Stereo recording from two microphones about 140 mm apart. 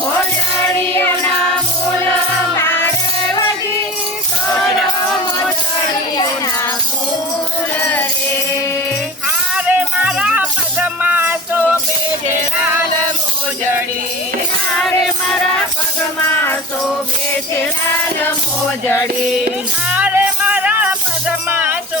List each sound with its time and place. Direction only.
0.8 s music: 20° left (ahead or behind)
2.6 s music: 15° left (ahead or behind)
9.6 s music: 10° right (ahead or behind)
19.9 s music: 10° right (ahead or behind)